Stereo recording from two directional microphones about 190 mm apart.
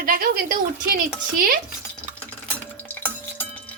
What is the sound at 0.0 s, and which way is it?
Speech, 50° right (ahead or behind).